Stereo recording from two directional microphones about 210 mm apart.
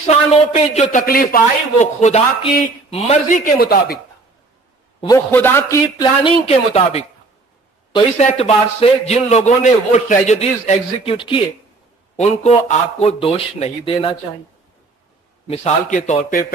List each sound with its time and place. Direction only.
0.0 s a man's voice: 30° left (ahead or behind)
5.0 s a man's voice: 15° left (ahead or behind)
15.4 s a man's voice: 30° left (ahead or behind)